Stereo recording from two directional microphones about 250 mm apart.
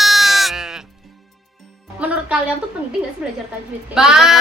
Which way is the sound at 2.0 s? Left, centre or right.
Centre.